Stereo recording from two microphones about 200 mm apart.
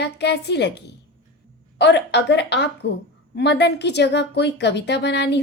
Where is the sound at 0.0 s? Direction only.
55° left (ahead or behind).